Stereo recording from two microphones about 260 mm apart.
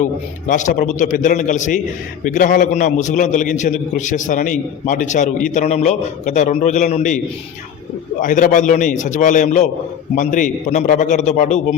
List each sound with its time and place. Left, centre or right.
0.0 s a man's voice: left
8.2 s a man's voice: left